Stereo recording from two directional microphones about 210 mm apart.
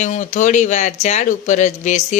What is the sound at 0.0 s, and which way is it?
Speech, 35° left (ahead or behind).